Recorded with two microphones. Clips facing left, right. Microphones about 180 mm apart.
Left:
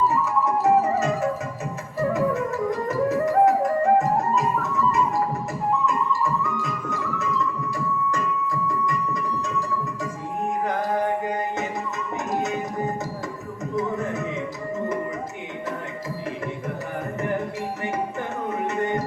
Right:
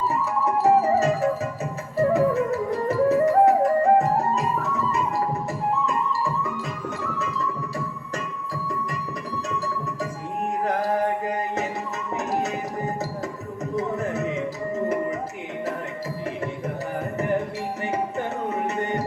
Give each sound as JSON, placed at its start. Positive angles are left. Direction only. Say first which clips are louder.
{"t": 0.1, "sound": "music", "louder": "left 1 dB", "side_deg": -35}
{"t": 2.0, "sound": "flute", "louder": "right 3 dB", "side_deg": -35}
{"t": 5.8, "sound": "music", "louder": "left 1 dB", "side_deg": -35}
{"t": 12.3, "sound": "music", "louder": "left 1 dB", "side_deg": -35}
{"t": 13.7, "sound": "a sound", "louder": "even", "side_deg": -35}
{"t": 17.9, "sound": "music", "louder": "right 1 dB", "side_deg": -35}